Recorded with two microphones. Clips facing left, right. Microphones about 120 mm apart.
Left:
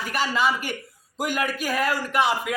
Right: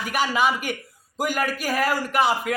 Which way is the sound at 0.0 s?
10° right (ahead or behind).